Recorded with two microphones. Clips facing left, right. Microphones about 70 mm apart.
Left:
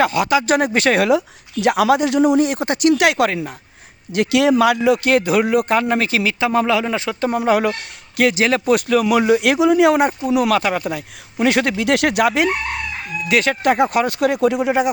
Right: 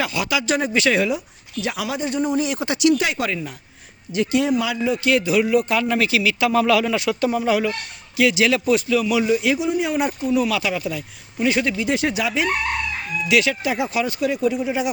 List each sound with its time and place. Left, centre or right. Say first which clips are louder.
0.0 s speech: left 7 dB; left
1.6 s a man's voice: left 11 dB; left
2.4 s speech: left 3 dB; left
2.9 s a man's voice: left 6 dB; left
3.2 s speech: left 4 dB; left
4.1 s a man's voice: left 4 dB; left
5.0 s a man's voice: left 3 dB; left
8.1 s speech: left 2 dB; left
10.0 s speech: left 4 dB; left
13.2 s speech: left 4 dB; left